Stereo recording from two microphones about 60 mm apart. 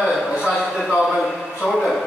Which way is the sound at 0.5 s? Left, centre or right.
Centre.